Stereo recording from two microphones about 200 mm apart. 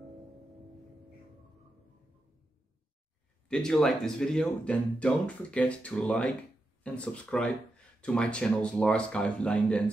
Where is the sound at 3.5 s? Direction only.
5° left (ahead or behind).